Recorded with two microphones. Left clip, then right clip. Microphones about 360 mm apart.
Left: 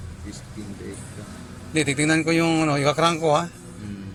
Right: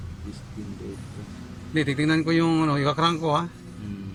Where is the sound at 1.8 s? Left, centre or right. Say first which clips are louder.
Left 3 dB; left.